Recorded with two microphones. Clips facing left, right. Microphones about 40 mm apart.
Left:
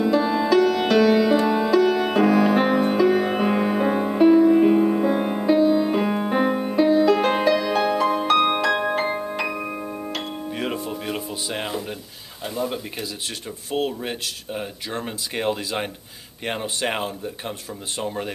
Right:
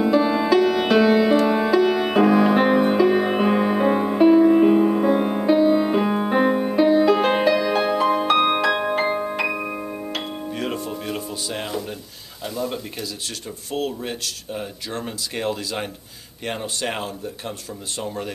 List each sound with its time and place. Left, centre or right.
0.0 s music: centre
5.6 s music: centre
5.9 s music: centre
10.5 s music: centre
13.7 s speech: centre